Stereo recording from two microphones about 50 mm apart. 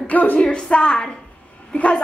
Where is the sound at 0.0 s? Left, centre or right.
Left.